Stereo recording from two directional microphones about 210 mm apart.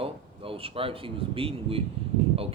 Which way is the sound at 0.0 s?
25° right (ahead or behind).